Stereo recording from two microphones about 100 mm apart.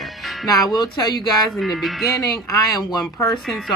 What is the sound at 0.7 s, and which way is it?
Speech, 45° left (ahead or behind).